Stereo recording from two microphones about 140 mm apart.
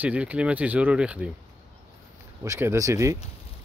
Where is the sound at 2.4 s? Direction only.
20° right (ahead or behind).